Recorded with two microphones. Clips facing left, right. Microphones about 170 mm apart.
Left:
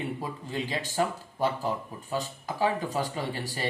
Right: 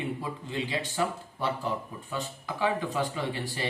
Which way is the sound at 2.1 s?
40° left (ahead or behind).